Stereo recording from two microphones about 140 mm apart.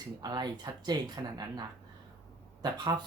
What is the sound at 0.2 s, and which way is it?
Speech, 30° right (ahead or behind).